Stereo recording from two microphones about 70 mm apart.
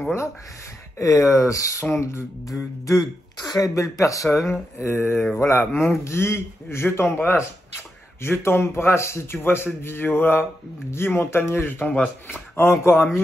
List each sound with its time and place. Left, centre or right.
1.2 s speech: left
1.9 s a man's voice: left
2.4 s speech: left
4.8 s a man's voice: left